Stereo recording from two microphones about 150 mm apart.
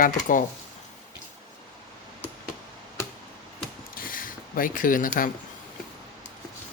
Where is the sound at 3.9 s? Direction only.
70° left (ahead or behind).